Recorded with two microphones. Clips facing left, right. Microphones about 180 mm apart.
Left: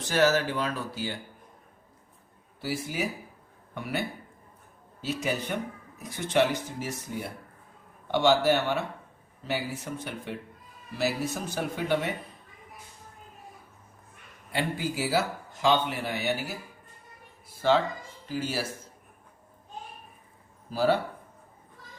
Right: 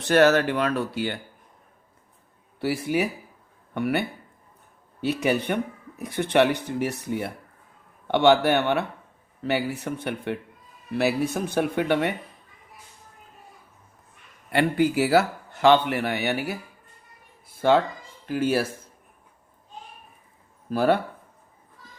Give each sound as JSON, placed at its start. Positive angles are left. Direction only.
{"t": 0.0, "sound": "speech", "side_deg": -65}
{"t": 2.6, "sound": "speech", "side_deg": -60}
{"t": 14.5, "sound": "speech", "side_deg": -65}
{"t": 17.6, "sound": "speech", "side_deg": -55}
{"t": 20.7, "sound": "speech", "side_deg": -60}